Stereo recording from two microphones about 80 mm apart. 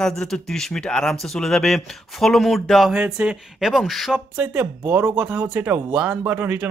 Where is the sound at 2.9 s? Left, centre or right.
Centre.